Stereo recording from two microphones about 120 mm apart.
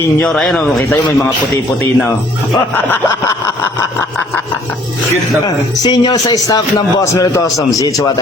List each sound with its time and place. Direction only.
0.2 s a man's voice: 5° left (ahead or behind)
5.8 s a man's voice: 35° left (ahead or behind)